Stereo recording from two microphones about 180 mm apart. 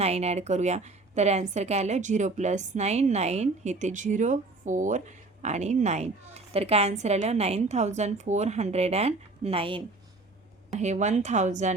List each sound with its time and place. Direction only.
0.0 s a woman's voice: 35° right (ahead or behind)
10.7 s a woman's voice: 40° right (ahead or behind)